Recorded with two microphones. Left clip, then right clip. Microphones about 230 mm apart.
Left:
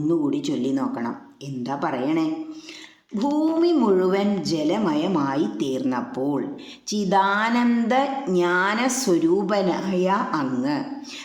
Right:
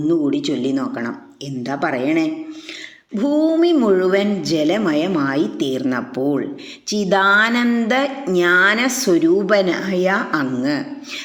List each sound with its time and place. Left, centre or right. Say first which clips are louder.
0.1 s speech: right 5 dB; centre